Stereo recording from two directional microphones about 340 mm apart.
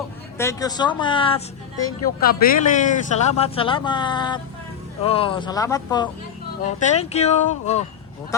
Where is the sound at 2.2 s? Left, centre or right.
Left.